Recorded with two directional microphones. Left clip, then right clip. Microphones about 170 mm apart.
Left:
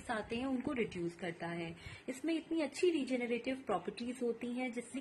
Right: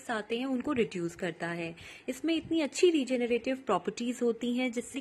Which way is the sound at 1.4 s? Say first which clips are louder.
Right 7 dB; 40° right (ahead or behind).